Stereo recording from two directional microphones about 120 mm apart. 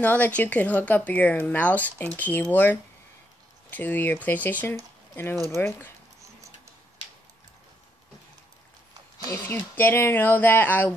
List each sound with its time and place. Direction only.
0.0 s speech: 15° left (ahead or behind)
9.3 s speech: 15° left (ahead or behind)